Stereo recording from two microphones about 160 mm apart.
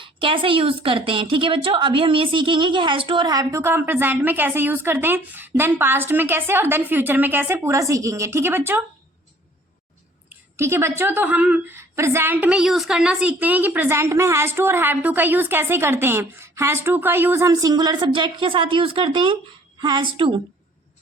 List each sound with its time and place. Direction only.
0.0 s a woman's voice: 30° right (ahead or behind); by 8.8 s 15° right (ahead or behind)
10.2 s a woman's voice: 15° right (ahead or behind); by 20.3 s 30° right (ahead or behind)